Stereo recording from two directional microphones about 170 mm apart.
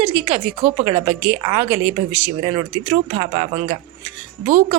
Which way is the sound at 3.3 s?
45° right (ahead or behind).